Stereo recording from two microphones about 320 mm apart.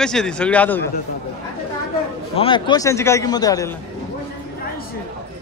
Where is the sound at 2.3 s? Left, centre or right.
Centre.